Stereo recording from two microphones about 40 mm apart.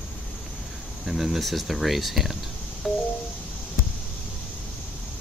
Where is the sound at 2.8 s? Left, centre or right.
Centre.